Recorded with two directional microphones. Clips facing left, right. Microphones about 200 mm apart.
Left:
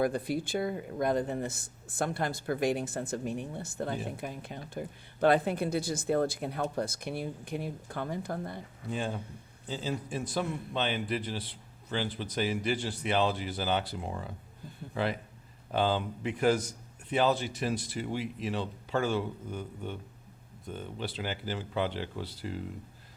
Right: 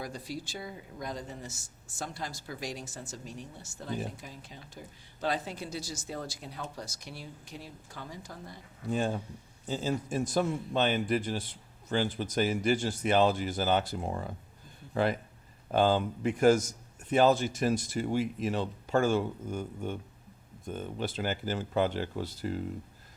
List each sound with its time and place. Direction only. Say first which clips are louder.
0.0 s speech: left 9 dB; 55° left (ahead or behind)
8.9 s a man's voice: right 4 dB; 45° right (ahead or behind)
15.7 s a man's voice: right 3 dB; 45° right (ahead or behind)